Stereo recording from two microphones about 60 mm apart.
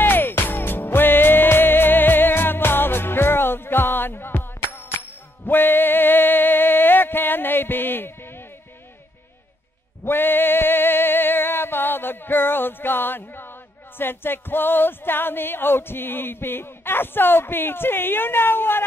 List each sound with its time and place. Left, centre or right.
0.0 s music: left
10.0 s music: left